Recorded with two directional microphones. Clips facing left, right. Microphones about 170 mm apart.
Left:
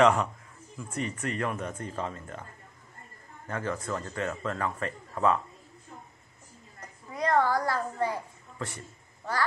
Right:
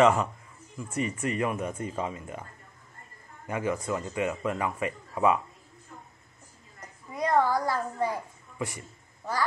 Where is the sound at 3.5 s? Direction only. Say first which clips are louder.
Right 3 dB; 15° right (ahead or behind).